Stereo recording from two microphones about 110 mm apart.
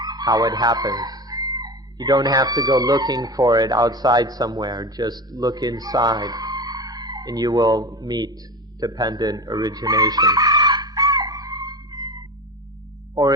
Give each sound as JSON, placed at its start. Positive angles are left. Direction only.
{"t": 0.0, "sound": "speech", "side_deg": -35}
{"t": 8.8, "sound": "chicken", "side_deg": -35}